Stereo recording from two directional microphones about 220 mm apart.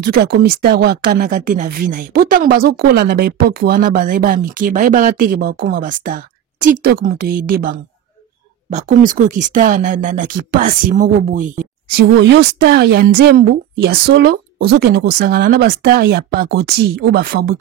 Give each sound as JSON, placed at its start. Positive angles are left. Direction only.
{"t": 0.0, "sound": "speech", "side_deg": -45}
{"t": 12.2, "sound": "a woman's voice", "side_deg": -50}